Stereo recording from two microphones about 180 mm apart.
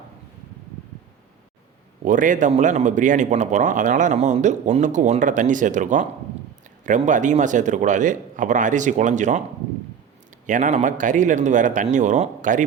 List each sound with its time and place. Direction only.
2.0 s speech: 45° right (ahead or behind)
10.4 s speech: 45° right (ahead or behind)